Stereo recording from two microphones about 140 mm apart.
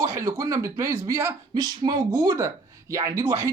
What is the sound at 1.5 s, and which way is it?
Speech, 30° right (ahead or behind).